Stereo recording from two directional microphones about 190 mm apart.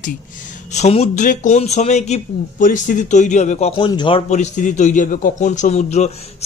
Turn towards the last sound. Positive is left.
turn(degrees=35)  # may be behind; listen again after turning